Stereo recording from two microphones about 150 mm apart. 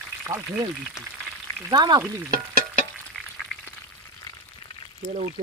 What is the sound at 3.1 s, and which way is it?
Frying, centre (ahead or behind).